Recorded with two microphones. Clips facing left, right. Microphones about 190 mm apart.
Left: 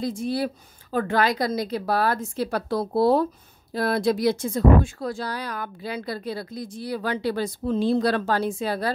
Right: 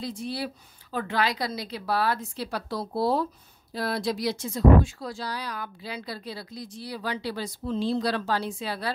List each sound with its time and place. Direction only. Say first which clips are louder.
0.0 s speech: left 6 dB; 45° left (ahead or behind)